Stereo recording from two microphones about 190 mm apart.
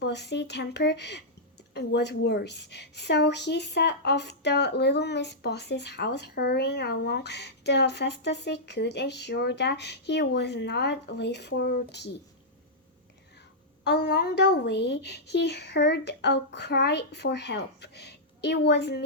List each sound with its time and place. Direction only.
0.0 s a woman's voice: 65° left (ahead or behind)
13.8 s a woman's voice: 60° left (ahead or behind)